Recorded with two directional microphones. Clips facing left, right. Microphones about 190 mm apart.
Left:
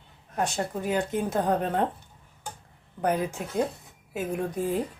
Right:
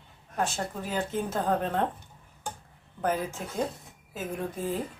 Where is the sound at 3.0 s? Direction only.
15° left (ahead or behind).